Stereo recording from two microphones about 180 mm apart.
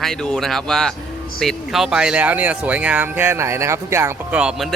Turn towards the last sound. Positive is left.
turn(degrees=-5)  # may be behind; listen again after turning